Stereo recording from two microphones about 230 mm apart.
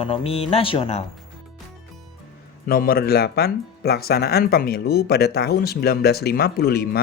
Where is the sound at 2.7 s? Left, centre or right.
Left.